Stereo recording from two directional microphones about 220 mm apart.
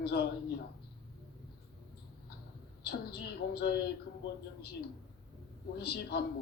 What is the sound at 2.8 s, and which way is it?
Speech, 45° left (ahead or behind).